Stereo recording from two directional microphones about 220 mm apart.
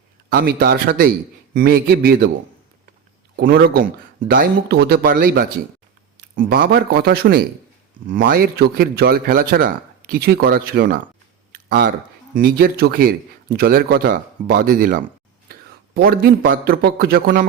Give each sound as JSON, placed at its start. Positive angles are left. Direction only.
{"t": 0.3, "sound": "a man's voice", "side_deg": -45}
{"t": 3.3, "sound": "a man's voice", "side_deg": -45}